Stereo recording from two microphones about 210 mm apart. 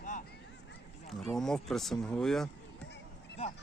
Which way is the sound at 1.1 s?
Centre (ahead or behind).